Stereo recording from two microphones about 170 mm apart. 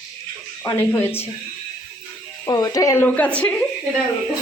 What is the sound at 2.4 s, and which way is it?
Speech, 25° left (ahead or behind).